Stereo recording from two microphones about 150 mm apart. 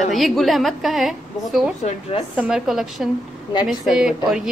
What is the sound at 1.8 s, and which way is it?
Speech, 40° left (ahead or behind).